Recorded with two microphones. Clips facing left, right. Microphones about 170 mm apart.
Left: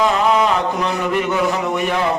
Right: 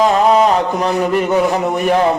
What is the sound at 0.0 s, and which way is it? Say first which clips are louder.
A man's voice: right 4 dB; 40° right (ahead or behind).